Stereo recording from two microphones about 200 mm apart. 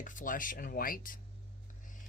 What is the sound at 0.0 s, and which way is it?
Speech, 40° left (ahead or behind).